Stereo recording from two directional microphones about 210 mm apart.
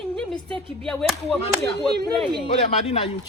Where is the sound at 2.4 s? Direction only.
25° left (ahead or behind).